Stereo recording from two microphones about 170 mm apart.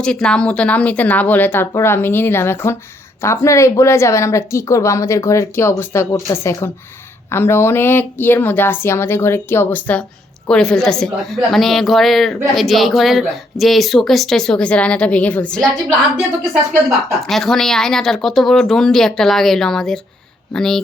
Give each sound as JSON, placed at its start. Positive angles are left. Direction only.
{"t": 0.0, "sound": "a woman's voice", "side_deg": 5}
{"t": 17.2, "sound": "a woman's voice", "side_deg": 0}